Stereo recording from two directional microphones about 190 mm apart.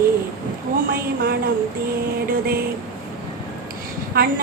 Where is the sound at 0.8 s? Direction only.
50° right (ahead or behind).